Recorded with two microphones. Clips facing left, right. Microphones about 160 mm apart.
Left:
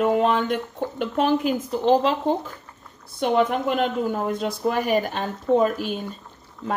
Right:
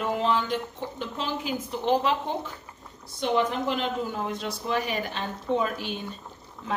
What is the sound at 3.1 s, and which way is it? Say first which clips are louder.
Speech: left 5 dB; 55° left (ahead or behind).